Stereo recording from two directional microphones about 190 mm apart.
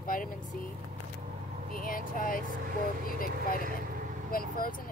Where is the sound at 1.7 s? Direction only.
45° left (ahead or behind).